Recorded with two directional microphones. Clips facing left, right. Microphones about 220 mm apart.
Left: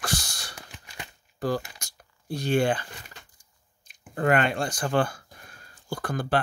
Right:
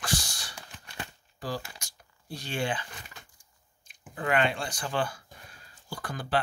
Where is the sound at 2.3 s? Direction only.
45° left (ahead or behind).